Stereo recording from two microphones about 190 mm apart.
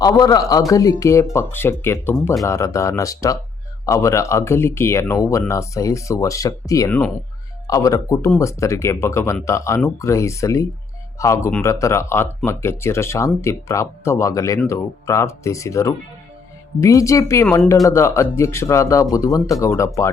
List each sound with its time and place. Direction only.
0.0 s speech: 20° left (ahead or behind)